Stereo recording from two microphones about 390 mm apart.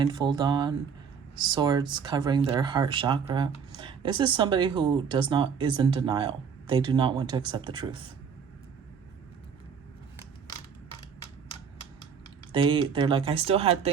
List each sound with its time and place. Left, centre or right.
0.0 s speech: centre
12.5 s speech: centre